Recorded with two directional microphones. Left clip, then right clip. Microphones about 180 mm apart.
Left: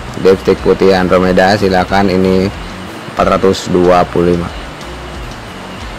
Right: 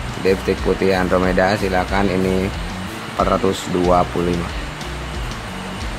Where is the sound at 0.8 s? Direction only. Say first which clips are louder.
Left 7 dB; 25° left (ahead or behind).